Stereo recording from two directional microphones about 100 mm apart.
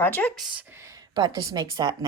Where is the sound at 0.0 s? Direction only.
20° left (ahead or behind).